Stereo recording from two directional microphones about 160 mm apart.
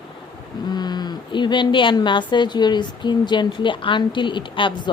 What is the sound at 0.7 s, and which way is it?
A woman's voice, 25° left (ahead or behind).